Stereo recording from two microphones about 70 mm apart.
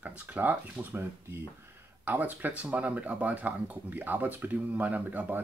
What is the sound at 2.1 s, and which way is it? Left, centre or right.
Speech, right.